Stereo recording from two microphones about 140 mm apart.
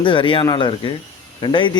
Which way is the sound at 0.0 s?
35° left (ahead or behind).